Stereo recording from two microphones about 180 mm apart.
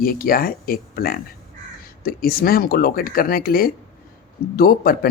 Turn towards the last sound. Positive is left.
turn(degrees=55)  # may be behind; listen again after turning